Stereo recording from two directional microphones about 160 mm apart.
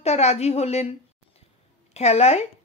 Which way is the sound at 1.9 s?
40° left (ahead or behind).